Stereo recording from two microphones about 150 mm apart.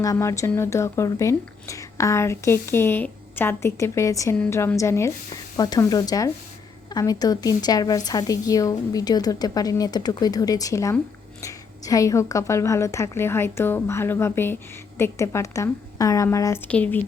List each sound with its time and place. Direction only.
0.0 s a woman's voice: 20° left (ahead or behind)
16.6 s speech: 10° left (ahead or behind)